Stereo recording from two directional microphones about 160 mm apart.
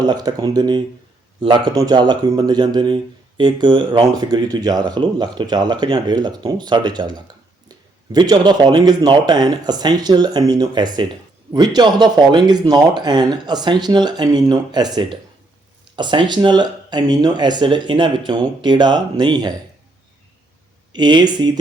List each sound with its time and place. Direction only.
0.0 s speech: 25° right (ahead or behind)
20.9 s speech: 25° right (ahead or behind)